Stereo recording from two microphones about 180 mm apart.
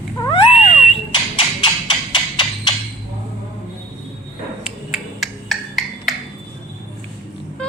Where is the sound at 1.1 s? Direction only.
25° left (ahead or behind).